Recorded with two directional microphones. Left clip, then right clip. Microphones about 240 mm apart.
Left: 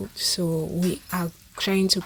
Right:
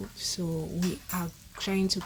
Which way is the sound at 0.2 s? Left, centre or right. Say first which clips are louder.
Left 9 dB; left.